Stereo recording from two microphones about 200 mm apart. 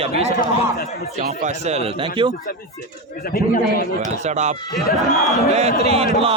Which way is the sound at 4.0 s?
35° right (ahead or behind).